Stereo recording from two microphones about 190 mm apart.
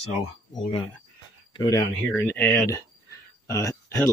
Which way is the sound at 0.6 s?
30° left (ahead or behind).